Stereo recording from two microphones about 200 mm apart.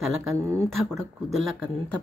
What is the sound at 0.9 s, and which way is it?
Speech, centre (ahead or behind).